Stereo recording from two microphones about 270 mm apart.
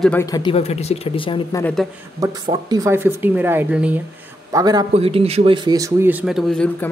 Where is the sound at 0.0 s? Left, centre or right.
Centre.